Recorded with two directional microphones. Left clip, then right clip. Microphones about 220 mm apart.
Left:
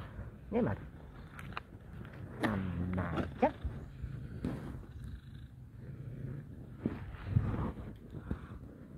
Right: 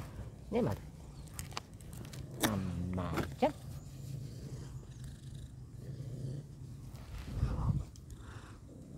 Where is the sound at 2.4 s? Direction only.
5° right (ahead or behind).